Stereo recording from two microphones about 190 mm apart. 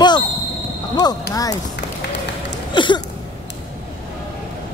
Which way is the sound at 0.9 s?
20° left (ahead or behind).